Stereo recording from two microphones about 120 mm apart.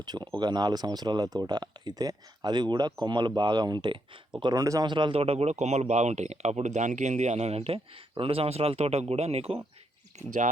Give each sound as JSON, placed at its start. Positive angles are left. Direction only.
{"t": 0.0, "sound": "speech", "side_deg": -35}
{"t": 4.9, "sound": "speech", "side_deg": -40}